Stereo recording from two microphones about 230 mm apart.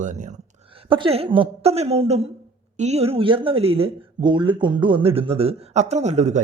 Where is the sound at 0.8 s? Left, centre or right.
Right.